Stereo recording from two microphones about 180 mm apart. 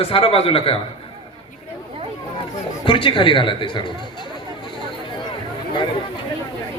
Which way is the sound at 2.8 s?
30° left (ahead or behind).